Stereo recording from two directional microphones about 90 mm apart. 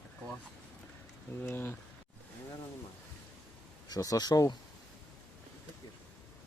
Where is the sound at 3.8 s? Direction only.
40° left (ahead or behind).